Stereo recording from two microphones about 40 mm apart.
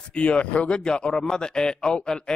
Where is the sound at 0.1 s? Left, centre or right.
Left.